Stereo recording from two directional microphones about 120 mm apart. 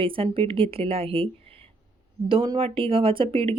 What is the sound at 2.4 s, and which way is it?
Speech, 45° right (ahead or behind).